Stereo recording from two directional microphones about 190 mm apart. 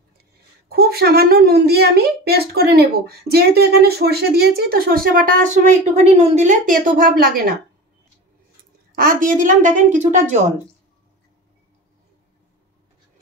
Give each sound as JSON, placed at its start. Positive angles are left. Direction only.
{"t": 0.7, "sound": "a woman's voice", "side_deg": -55}
{"t": 8.9, "sound": "a woman's voice", "side_deg": -45}